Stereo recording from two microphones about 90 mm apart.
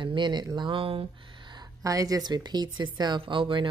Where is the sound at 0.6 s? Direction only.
70° right (ahead or behind).